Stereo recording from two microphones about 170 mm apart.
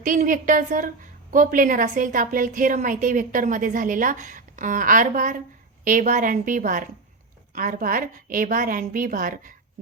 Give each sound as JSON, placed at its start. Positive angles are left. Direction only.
{"t": 0.0, "sound": "a woman's voice", "side_deg": -50}